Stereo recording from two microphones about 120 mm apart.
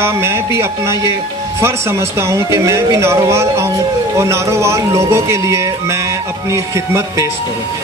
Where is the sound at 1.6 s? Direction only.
20° right (ahead or behind).